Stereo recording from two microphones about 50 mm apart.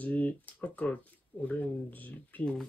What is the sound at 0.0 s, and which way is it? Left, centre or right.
Speech, left.